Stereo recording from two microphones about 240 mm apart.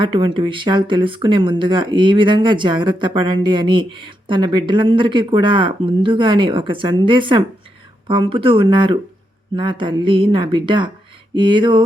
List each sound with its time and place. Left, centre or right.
0.0 s speech: right